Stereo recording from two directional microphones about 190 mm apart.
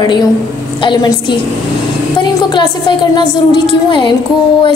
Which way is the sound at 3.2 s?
25° left (ahead or behind).